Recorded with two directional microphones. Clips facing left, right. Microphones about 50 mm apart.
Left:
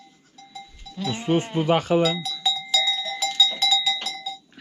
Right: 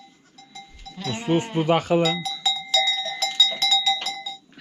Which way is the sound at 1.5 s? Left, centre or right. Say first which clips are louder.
Right 1 dB; right.